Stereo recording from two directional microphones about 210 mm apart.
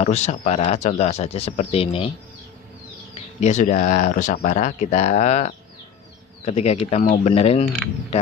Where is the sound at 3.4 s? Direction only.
35° left (ahead or behind).